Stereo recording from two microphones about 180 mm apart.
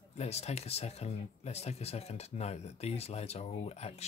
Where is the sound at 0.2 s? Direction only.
35° left (ahead or behind).